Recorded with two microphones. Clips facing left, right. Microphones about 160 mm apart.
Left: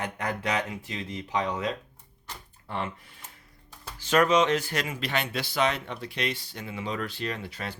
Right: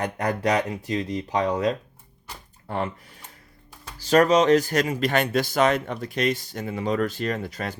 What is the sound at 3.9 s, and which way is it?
Speech, 35° right (ahead or behind).